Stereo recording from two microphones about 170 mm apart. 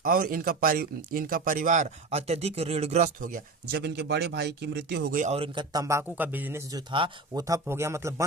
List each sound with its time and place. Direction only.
0.0 s speech: 55° right (ahead or behind); by 5.1 s 80° right
5.1 s speech: 40° right (ahead or behind)
5.7 s speech: 20° right (ahead or behind)